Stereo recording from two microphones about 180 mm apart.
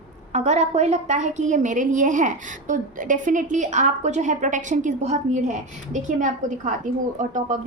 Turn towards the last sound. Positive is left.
turn(degrees=-45)  # may be behind; listen again after turning